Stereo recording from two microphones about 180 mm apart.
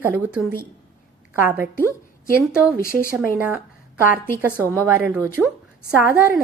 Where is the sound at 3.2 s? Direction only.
10° right (ahead or behind).